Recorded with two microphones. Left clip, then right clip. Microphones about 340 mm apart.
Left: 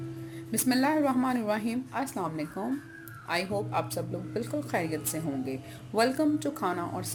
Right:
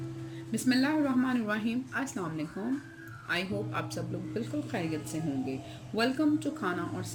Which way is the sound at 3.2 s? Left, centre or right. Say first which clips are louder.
Left 2 dB; centre.